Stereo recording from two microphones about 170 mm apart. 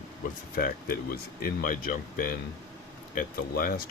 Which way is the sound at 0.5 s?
60° left (ahead or behind).